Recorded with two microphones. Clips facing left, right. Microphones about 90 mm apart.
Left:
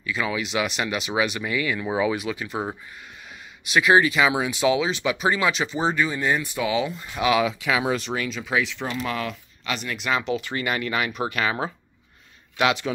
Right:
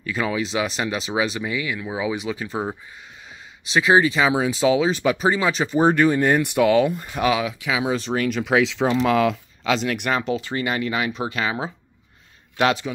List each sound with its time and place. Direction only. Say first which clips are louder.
0.0 s speech: right 3 dB; 40° right (ahead or behind); by 1.8 s 15° right (ahead or behind)
1.8 s speech: left 2 dB; 5° right (ahead or behind)
2.3 s speech: right 2 dB; 35° right (ahead or behind)
3.6 s speech: right 1 dB; 30° right (ahead or behind); by 7.1 s 55° right (ahead or behind)
7.3 s speech: left 2 dB; 15° right (ahead or behind)
7.9 s speech: right 2 dB; 35° right (ahead or behind)
8.2 s speech: right 6 dB; 60° right (ahead or behind); by 9.4 s 90° right
9.8 s speech: right 4 dB; 60° right (ahead or behind)
10.1 s speech: right 2 dB; 35° right (ahead or behind)
12.5 s a man's voice: right 2 dB; 35° right (ahead or behind)